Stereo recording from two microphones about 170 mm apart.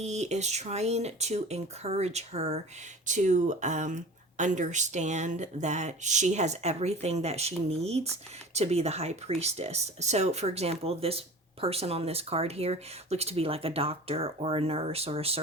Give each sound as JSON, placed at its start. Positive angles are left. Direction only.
{"t": 0.0, "sound": "speech", "side_deg": -40}